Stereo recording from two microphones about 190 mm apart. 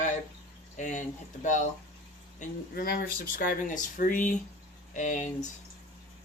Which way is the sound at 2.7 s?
50° left (ahead or behind).